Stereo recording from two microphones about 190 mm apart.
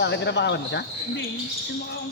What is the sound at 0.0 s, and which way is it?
Speech, 65° left (ahead or behind).